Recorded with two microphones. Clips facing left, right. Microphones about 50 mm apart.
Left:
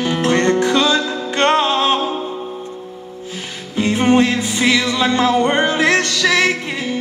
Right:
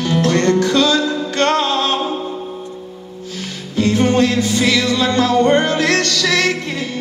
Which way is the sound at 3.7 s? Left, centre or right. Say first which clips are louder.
Even; left.